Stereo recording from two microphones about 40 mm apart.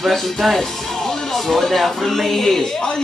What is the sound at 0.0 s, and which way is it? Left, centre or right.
Speech, centre.